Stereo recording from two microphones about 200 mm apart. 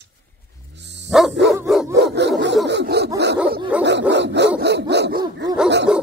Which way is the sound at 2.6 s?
55° right (ahead or behind).